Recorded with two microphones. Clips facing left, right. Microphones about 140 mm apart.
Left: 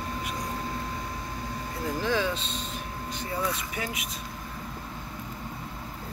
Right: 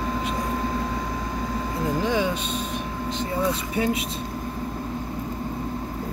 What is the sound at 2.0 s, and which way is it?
Speech, 15° right (ahead or behind).